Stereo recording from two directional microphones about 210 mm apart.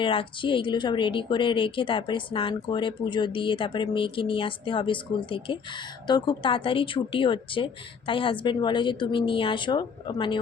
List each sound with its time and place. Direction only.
0.0 s a woman's voice: 25° left (ahead or behind)